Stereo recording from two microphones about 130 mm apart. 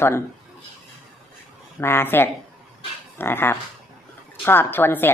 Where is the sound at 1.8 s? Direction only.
20° left (ahead or behind).